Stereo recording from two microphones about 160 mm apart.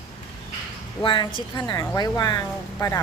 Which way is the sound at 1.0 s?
30° left (ahead or behind).